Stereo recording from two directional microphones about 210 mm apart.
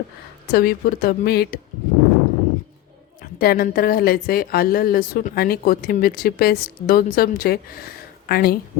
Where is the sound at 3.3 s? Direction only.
45° left (ahead or behind).